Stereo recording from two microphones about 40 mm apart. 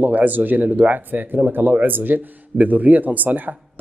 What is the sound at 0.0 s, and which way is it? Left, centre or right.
Speech, right.